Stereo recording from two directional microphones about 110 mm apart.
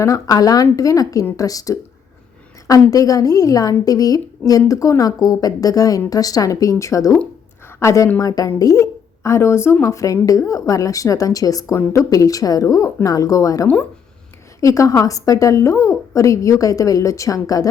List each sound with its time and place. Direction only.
0.0 s a woman's voice: 30° left (ahead or behind)
2.9 s a woman's voice: 30° left (ahead or behind)